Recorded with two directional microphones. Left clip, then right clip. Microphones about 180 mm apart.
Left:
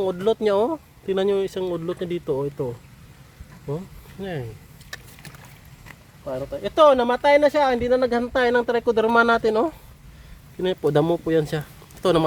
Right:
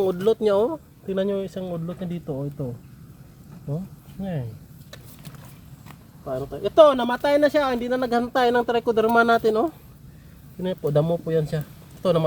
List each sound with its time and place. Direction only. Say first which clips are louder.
0.0 s speech: right 1 dB; 25° left (ahead or behind)
0.3 s speech: even; 40° left (ahead or behind)
1.0 s speech: left 4 dB; 65° left (ahead or behind)
4.2 s speech: left 2 dB; 85° left
6.2 s speech: even; 35° left (ahead or behind)
10.6 s speech: left 3 dB; 75° left (ahead or behind)